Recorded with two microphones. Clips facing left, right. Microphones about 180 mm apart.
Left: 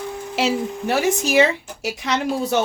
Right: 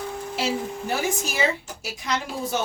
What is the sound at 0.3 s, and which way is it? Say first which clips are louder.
Speech: left 6 dB; 75° left (ahead or behind).